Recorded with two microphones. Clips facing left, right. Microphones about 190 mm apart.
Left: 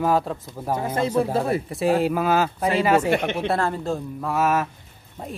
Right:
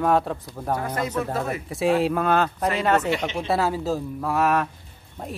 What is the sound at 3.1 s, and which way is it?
Speech, 55° left (ahead or behind).